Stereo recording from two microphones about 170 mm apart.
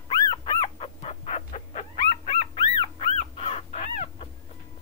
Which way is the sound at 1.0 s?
35° left (ahead or behind).